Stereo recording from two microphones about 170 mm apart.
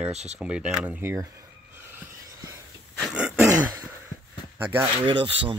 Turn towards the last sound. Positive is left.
turn(degrees=-30)  # may be behind; listen again after turning